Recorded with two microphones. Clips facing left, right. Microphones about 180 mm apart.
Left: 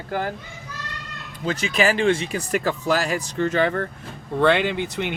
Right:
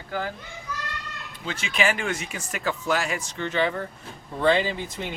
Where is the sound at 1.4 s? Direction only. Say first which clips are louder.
Left 5 dB; 40° left (ahead or behind).